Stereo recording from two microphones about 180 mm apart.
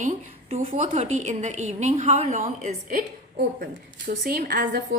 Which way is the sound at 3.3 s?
60° right (ahead or behind).